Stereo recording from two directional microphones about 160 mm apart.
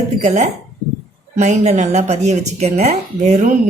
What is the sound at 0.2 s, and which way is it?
Speech, 45° right (ahead or behind).